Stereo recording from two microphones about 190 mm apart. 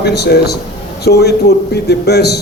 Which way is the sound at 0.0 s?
60° left (ahead or behind).